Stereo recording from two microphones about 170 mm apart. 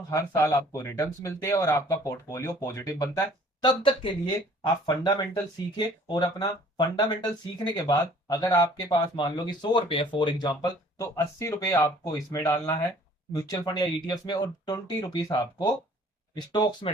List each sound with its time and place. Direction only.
0.1 s speech: 15° left (ahead or behind)